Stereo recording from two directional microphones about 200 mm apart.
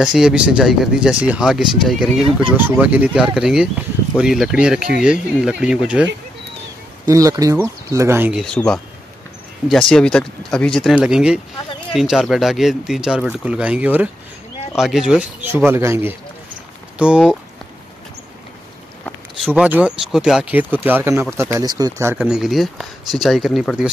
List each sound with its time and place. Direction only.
0.0 s speech: 5° right (ahead or behind)
7.1 s speech: 15° right (ahead or behind)
19.5 s speech: 5° right (ahead or behind)